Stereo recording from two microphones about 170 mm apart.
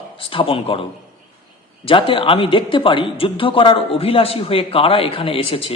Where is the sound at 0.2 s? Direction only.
30° left (ahead or behind).